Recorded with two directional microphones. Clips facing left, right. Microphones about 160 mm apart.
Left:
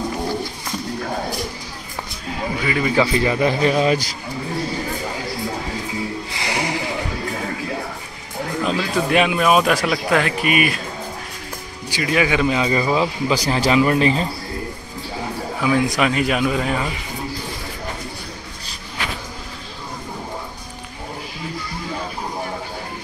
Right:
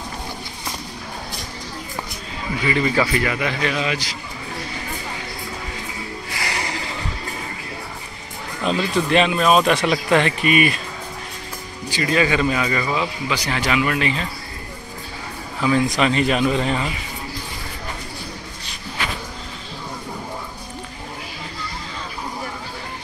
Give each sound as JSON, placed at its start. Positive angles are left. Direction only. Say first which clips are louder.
{"t": 2.7, "sound": "speech", "louder": "left 1 dB", "side_deg": 10}
{"t": 3.1, "sound": "speech", "louder": "left 4 dB", "side_deg": 25}
{"t": 6.3, "sound": "music", "louder": "left 2 dB", "side_deg": 20}
{"t": 8.6, "sound": "speech", "louder": "right 2 dB", "side_deg": 5}
{"t": 11.9, "sound": "speech", "louder": "even", "side_deg": 10}
{"t": 12.6, "sound": "speech", "louder": "left 4 dB", "side_deg": 25}
{"t": 16.0, "sound": "speech", "louder": "even", "side_deg": 5}